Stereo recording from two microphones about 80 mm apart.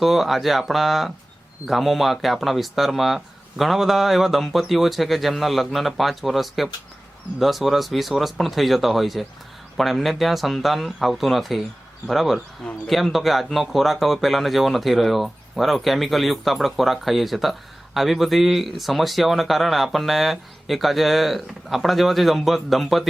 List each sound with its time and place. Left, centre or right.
0.0 s speech: centre